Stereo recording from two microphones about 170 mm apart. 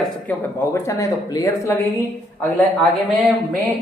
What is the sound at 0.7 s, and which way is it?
A woman's voice, 15° left (ahead or behind).